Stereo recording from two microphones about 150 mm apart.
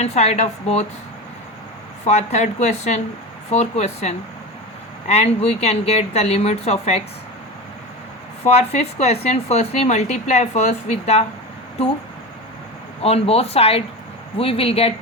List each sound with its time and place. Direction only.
0.0 s speech: 45° left (ahead or behind)
2.0 s speech: 50° left (ahead or behind)
8.4 s speech: 45° left (ahead or behind)
13.0 s speech: 40° left (ahead or behind)